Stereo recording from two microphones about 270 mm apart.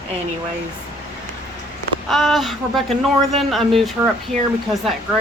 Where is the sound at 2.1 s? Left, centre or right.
Centre.